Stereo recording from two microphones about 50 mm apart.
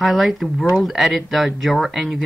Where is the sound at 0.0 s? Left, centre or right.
Centre.